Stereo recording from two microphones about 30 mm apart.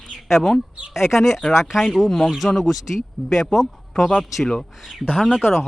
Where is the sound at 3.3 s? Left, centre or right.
Centre.